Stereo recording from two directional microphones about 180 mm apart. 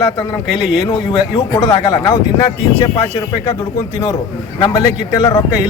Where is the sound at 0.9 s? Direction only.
20° left (ahead or behind).